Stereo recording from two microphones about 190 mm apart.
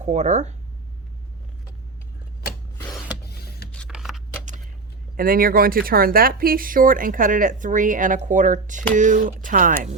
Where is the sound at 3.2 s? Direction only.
55° left (ahead or behind).